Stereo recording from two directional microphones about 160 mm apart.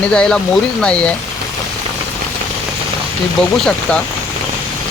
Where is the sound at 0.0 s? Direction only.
5° left (ahead or behind).